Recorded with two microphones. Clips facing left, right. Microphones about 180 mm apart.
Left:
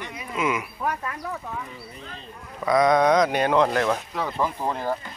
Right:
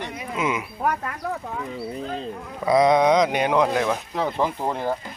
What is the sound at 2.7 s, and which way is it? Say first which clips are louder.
Speech: right 2 dB; 25° right (ahead or behind).